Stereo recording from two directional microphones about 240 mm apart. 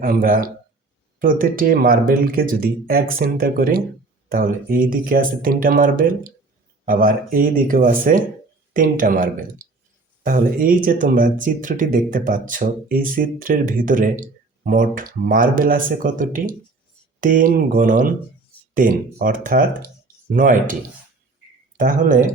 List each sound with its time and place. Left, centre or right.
0.0 s speech: right
21.8 s speech: right